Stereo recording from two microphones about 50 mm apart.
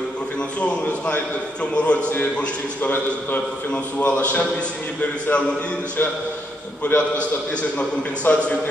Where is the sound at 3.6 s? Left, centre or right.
Left.